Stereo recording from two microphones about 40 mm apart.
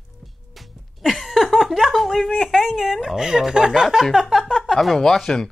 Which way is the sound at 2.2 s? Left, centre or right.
Centre.